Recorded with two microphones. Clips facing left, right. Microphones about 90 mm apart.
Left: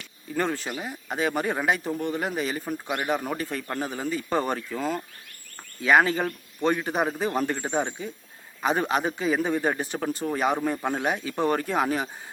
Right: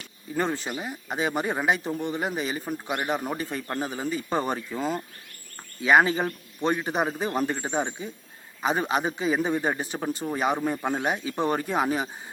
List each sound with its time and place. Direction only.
0.3 s speech: 15° right (ahead or behind)